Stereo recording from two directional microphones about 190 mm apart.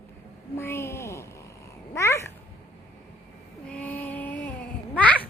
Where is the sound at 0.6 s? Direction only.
15° left (ahead or behind).